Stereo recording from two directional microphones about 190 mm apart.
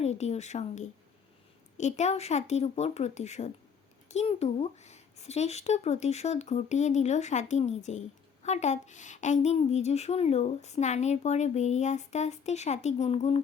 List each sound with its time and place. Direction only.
0.0 s a woman's voice: 35° left (ahead or behind)